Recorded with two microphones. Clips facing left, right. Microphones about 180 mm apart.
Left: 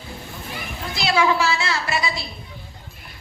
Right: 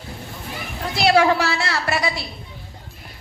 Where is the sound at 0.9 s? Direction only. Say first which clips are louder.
Right 4 dB; 65° right (ahead or behind).